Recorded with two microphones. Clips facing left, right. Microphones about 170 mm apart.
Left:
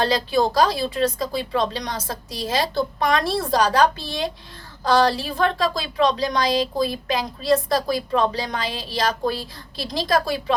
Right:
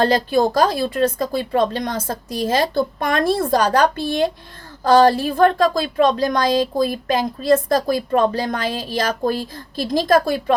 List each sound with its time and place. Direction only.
0.0 s a woman's voice: 50° right (ahead or behind)